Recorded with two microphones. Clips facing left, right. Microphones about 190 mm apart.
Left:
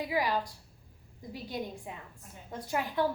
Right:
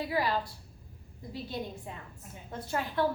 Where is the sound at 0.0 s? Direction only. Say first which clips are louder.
Even; 15° left (ahead or behind).